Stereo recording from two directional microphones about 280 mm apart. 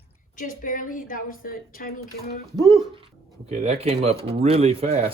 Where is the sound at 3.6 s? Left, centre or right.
Right.